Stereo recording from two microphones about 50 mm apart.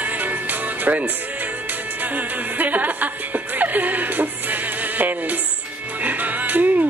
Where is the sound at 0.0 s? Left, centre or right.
Right.